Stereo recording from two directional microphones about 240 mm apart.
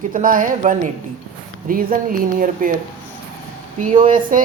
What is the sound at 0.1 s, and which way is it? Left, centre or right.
Speech, right.